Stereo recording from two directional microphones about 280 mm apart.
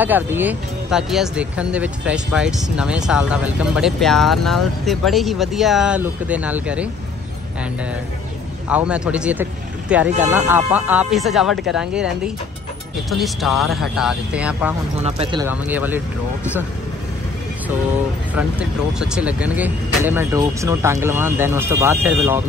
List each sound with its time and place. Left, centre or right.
0.0 s speech: centre
8.6 s speech: centre
13.1 s speech: centre
15.0 s speech: right
15.4 s speech: centre
18.6 s speech: centre